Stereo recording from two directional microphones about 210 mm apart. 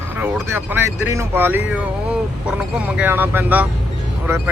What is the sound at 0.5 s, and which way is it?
Speech, 10° right (ahead or behind).